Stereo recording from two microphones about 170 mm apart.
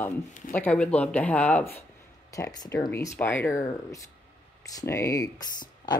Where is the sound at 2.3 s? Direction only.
20° left (ahead or behind).